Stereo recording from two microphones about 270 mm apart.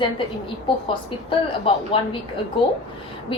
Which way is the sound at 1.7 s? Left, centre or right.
Centre.